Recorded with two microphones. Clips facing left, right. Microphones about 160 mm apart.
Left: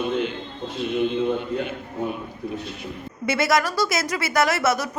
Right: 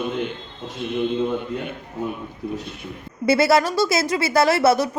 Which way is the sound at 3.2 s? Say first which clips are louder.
Right 5 dB; 30° right (ahead or behind).